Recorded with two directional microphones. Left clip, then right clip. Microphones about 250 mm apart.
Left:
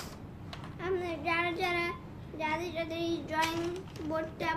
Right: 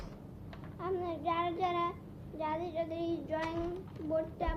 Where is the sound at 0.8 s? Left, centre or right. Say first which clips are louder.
Left 2 dB; centre.